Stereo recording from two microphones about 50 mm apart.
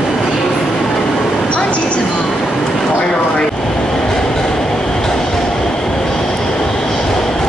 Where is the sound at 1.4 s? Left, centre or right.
Left.